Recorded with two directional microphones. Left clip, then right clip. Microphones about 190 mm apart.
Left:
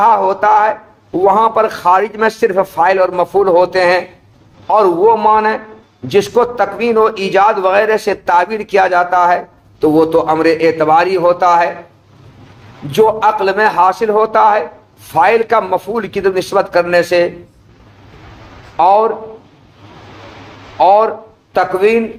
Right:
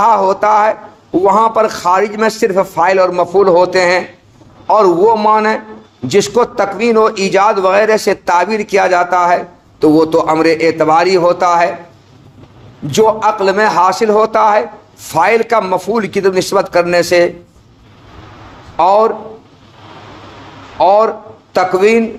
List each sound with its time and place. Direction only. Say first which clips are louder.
0.0 s a man's voice: even; 30° right (ahead or behind)
12.9 s a man's voice: even; 35° right (ahead or behind)
18.8 s a man's voice: even; 35° right (ahead or behind)
20.7 s speech: even; 35° right (ahead or behind)